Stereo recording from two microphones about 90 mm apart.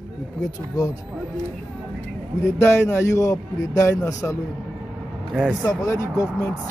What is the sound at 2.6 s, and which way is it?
A man's voice, 30° left (ahead or behind).